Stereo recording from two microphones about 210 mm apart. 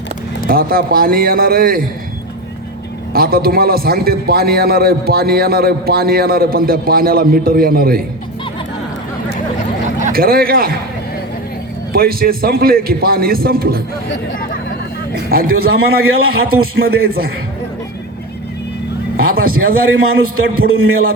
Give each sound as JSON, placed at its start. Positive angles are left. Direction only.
{"t": 0.4, "sound": "a man's voice", "side_deg": -45}
{"t": 3.1, "sound": "a man's voice", "side_deg": -45}
{"t": 10.0, "sound": "a man's voice", "side_deg": -45}
{"t": 11.9, "sound": "a man's voice", "side_deg": -45}
{"t": 15.1, "sound": "a man's voice", "side_deg": -45}
{"t": 19.1, "sound": "a man's voice", "side_deg": -45}
{"t": 20.8, "sound": "a sound", "side_deg": -75}